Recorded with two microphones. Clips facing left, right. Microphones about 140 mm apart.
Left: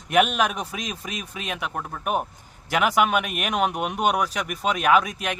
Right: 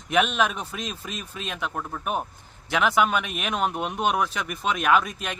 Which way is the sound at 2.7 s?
55° left (ahead or behind).